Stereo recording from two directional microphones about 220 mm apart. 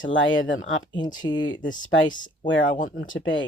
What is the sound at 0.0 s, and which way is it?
Speech, 60° left (ahead or behind).